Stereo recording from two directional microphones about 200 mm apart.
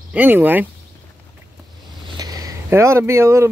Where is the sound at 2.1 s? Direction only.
20° right (ahead or behind).